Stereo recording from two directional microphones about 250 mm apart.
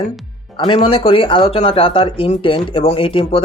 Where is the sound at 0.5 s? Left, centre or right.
Centre.